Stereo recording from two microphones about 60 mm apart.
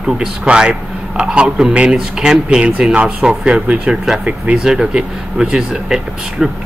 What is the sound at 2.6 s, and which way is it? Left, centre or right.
A man's voice, centre.